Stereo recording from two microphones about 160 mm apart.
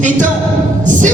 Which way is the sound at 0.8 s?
50° right (ahead or behind).